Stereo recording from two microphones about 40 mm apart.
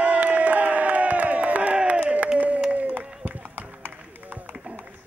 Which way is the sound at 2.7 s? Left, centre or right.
Right.